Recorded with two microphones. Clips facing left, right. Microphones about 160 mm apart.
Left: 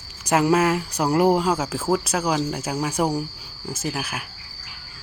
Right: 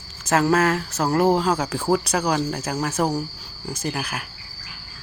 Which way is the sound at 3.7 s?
5° left (ahead or behind).